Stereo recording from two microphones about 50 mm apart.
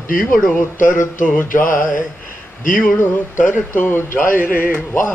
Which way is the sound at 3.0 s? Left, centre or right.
Left.